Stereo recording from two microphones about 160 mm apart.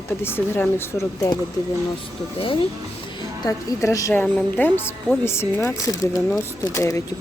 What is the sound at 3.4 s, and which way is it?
A woman's voice, 20° left (ahead or behind).